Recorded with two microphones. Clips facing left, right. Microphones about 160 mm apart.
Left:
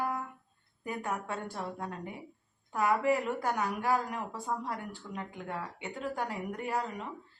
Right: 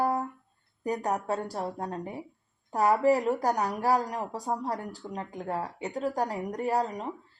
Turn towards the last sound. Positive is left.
turn(degrees=-35)  # may be behind; listen again after turning